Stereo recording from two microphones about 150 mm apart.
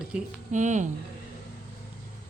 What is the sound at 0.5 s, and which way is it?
Speech, 55° right (ahead or behind).